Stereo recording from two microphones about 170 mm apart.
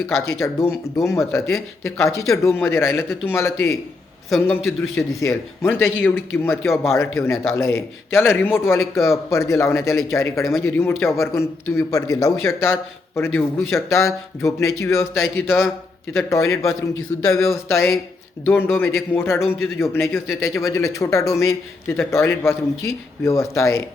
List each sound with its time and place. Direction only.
0.2 s speech: 15° left (ahead or behind)